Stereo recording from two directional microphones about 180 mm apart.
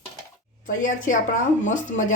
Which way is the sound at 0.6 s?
45° left (ahead or behind).